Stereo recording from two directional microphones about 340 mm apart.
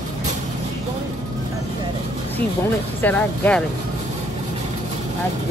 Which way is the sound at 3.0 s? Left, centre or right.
Centre.